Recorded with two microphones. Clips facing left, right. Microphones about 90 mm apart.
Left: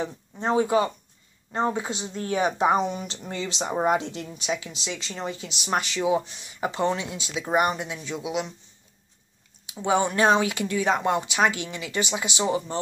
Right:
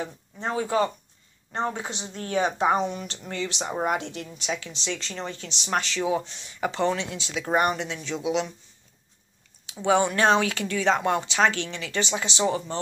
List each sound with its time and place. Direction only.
0.0 s speech: 25° left (ahead or behind)
9.8 s speech: 15° left (ahead or behind)